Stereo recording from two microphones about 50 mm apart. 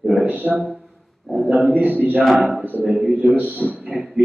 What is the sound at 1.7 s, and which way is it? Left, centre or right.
Speech, right.